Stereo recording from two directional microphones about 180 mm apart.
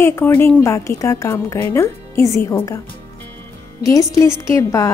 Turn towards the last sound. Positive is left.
turn(degrees=15)  # may be behind; listen again after turning